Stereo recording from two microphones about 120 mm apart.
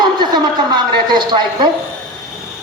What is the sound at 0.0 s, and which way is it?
Speech, 35° right (ahead or behind).